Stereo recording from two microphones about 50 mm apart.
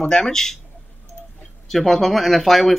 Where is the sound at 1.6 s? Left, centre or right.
Centre.